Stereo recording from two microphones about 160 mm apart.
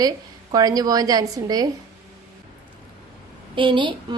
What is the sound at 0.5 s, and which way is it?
A woman's voice, 25° right (ahead or behind).